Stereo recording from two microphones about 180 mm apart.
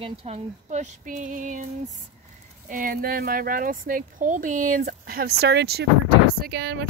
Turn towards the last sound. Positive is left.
turn(degrees=-65)  # may be behind; listen again after turning